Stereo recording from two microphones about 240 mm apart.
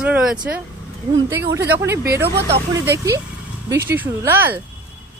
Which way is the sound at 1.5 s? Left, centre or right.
Centre.